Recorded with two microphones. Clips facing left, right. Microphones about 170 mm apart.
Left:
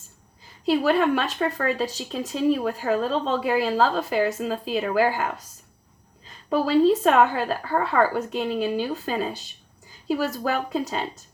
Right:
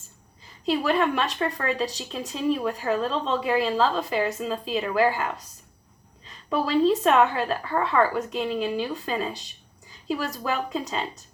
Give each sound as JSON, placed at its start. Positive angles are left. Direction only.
{"t": 0.6, "sound": "speech", "side_deg": 45}